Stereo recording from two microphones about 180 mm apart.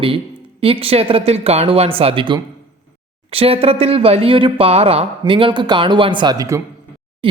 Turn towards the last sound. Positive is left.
turn(degrees=-30)  # may be behind; listen again after turning